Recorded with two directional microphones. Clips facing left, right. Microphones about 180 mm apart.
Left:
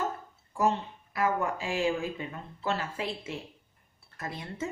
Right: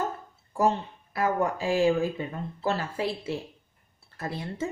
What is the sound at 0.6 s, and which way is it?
Speech, 35° right (ahead or behind).